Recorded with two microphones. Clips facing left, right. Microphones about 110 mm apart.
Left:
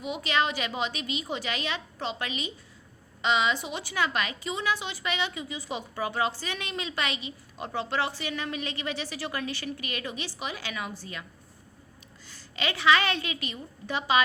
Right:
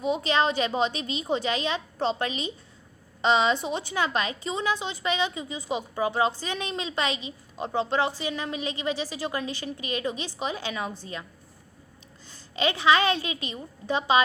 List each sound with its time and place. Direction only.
0.0 s a woman's voice: 30° right (ahead or behind)
12.5 s a woman's voice: 20° right (ahead or behind)